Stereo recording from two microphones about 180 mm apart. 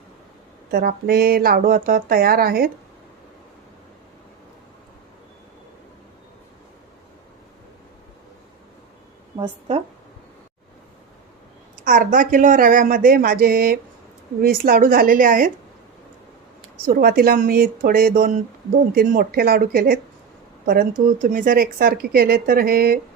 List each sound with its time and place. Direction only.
0.7 s speech: 60° right (ahead or behind)
9.4 s a woman's voice: 35° right (ahead or behind)
11.9 s speech: 45° right (ahead or behind)
16.8 s speech: 60° right (ahead or behind)